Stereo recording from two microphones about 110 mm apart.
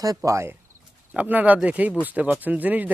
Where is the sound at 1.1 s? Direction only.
15° right (ahead or behind).